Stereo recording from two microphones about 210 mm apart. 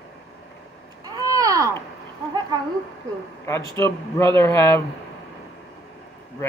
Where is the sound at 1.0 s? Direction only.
15° right (ahead or behind).